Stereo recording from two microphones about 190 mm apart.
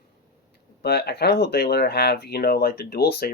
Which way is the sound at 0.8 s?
60° left (ahead or behind).